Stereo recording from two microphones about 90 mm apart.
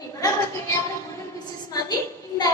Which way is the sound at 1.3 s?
50° left (ahead or behind).